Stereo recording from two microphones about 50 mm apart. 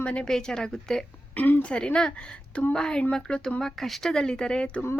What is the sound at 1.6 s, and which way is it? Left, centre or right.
A woman's voice, centre.